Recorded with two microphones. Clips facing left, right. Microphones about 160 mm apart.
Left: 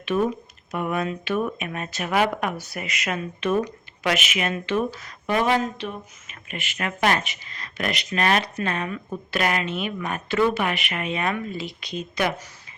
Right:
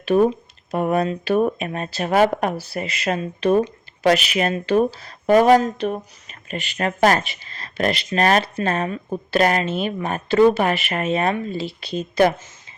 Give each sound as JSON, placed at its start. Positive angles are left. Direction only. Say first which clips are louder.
{"t": 0.0, "sound": "speech", "louder": "right 6 dB", "side_deg": -35}